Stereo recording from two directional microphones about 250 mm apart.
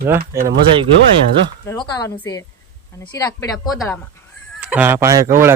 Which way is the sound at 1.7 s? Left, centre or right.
Centre.